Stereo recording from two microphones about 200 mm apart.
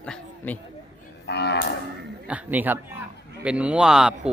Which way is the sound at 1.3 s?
55° left (ahead or behind).